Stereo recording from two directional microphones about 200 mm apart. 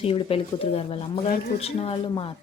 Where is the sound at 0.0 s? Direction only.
30° left (ahead or behind).